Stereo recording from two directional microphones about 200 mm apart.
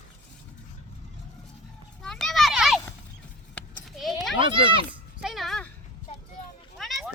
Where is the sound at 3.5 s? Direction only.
Centre (ahead or behind).